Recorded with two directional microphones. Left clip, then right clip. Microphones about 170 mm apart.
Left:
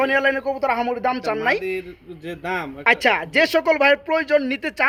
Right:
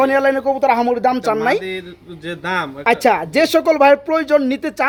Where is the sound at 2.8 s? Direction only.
15° right (ahead or behind).